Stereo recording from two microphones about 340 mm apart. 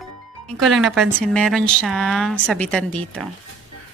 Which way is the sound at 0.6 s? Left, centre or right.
Centre.